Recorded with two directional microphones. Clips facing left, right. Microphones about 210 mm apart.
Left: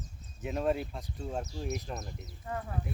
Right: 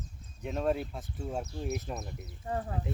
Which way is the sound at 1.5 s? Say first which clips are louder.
Right 1 dB; 55° right (ahead or behind).